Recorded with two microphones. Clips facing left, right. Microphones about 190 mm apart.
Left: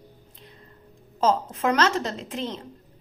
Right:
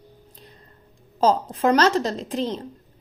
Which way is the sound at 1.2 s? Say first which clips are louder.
Right 3 dB; 35° right (ahead or behind).